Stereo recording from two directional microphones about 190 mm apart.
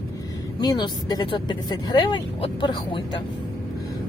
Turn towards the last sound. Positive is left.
turn(degrees=25)  # may be behind; listen again after turning